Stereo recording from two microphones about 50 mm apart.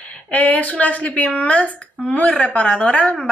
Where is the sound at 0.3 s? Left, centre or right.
Left.